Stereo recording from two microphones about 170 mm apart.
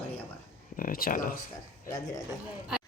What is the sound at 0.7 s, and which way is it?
Speech, 55° left (ahead or behind).